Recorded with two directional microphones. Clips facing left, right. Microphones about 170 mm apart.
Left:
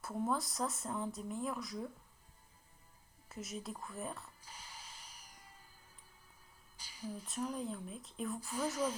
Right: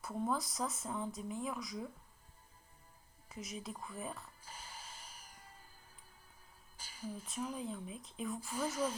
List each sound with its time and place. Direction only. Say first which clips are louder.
0.0 s speech: left 1 dB; centre (ahead or behind)
3.2 s speech: left 1 dB; centre (ahead or behind)
4.4 s cat: right 2 dB; 50° right (ahead or behind)
6.7 s music: even; 50° right (ahead or behind)
7.3 s speech: left 2 dB; 5° right (ahead or behind)